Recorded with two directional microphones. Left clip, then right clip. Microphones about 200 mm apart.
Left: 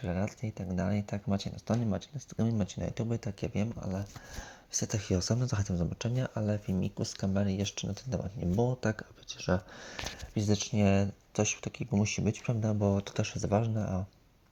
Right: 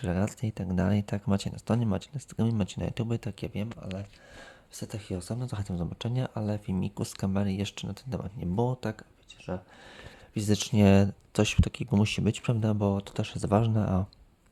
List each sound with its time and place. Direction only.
0.0 s speech: 25° right (ahead or behind)
3.5 s speech: 5° right (ahead or behind)
4.7 s speech: 10° left (ahead or behind); by 8.8 s 10° right (ahead or behind)
9.0 s speech: 20° left (ahead or behind)
10.3 s speech: 30° right (ahead or behind)